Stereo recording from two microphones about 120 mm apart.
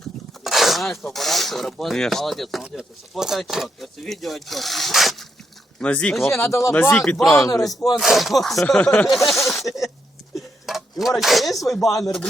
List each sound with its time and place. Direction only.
0.4 s speech: centre (ahead or behind)
5.8 s speech: 10° left (ahead or behind)
6.2 s speech: 20° left (ahead or behind)
7.0 s speech: 5° left (ahead or behind)
7.4 s speech: 30° left (ahead or behind)
7.9 s speech: centre (ahead or behind)
9.1 s a sound: centre (ahead or behind)
10.7 s speech: centre (ahead or behind)